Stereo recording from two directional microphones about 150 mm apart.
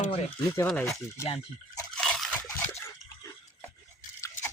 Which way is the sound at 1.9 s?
5° left (ahead or behind).